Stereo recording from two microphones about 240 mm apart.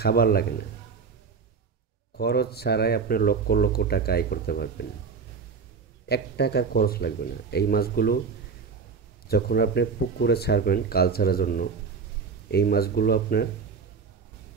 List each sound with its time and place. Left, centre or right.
0.0 s speech: left
2.1 s speech: left
6.0 s speech: left
9.3 s speech: left